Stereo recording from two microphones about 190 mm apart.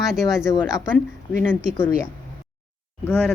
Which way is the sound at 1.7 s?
10° left (ahead or behind).